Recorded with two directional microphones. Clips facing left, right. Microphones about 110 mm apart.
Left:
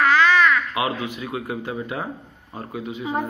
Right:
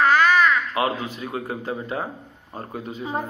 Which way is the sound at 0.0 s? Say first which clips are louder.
Even; 35° right (ahead or behind).